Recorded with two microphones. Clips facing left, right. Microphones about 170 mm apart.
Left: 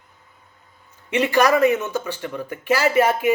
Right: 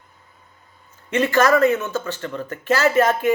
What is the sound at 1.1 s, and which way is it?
Speech, 15° left (ahead or behind).